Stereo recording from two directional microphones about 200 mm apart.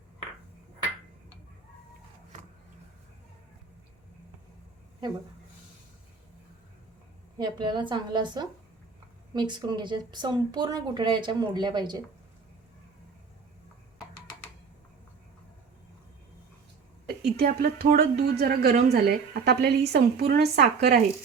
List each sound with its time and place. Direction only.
7.3 s speech: 20° right (ahead or behind)
17.2 s speech: 50° right (ahead or behind)